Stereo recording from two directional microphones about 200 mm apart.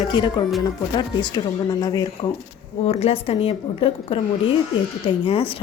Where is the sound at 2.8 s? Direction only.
30° left (ahead or behind).